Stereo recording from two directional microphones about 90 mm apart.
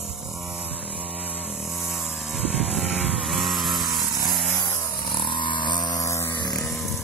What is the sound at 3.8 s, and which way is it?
Chainsaw, 45° right (ahead or behind).